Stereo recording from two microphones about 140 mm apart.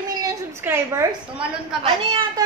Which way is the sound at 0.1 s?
25° right (ahead or behind).